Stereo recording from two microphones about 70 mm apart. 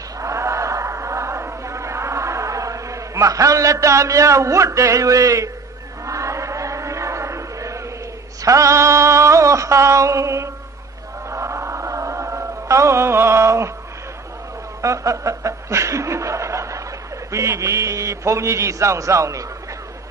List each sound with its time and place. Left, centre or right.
0.2 s chant: right
8.4 s a sound: right
11.2 s chant: right
14.8 s chuckle: right
17.3 s a man's voice: right